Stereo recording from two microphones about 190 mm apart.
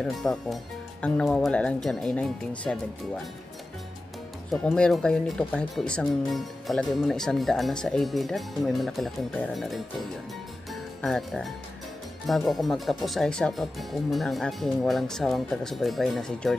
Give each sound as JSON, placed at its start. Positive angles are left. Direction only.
{"t": 0.0, "sound": "speech", "side_deg": 0}
{"t": 4.5, "sound": "speech", "side_deg": 5}
{"t": 10.7, "sound": "music", "side_deg": 0}
{"t": 12.3, "sound": "speech", "side_deg": 0}